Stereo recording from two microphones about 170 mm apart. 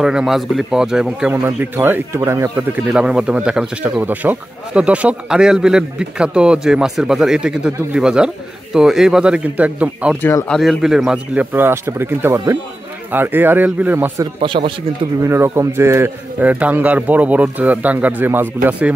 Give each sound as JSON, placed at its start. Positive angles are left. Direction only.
{"t": 0.0, "sound": "a man's voice", "side_deg": -5}
{"t": 14.4, "sound": "speech", "side_deg": -30}
{"t": 15.1, "sound": "a man's voice", "side_deg": -15}